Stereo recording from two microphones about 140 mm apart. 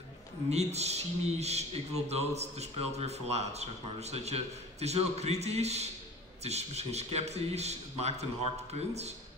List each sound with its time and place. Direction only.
0.5 s speech: 50° right (ahead or behind)